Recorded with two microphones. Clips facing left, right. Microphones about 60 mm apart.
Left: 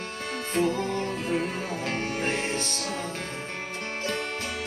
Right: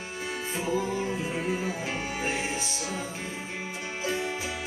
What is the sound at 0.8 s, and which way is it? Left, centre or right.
Music, left.